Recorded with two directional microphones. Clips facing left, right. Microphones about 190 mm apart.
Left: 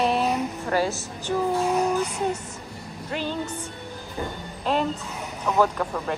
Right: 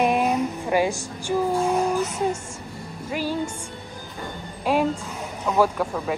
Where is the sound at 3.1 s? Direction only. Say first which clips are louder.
Right 3 dB; 10° right (ahead or behind).